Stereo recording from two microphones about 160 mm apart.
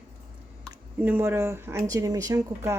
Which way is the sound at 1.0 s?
15° right (ahead or behind).